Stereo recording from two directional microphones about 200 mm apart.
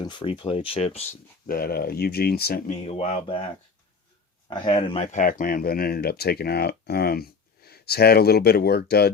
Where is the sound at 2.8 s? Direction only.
30° left (ahead or behind).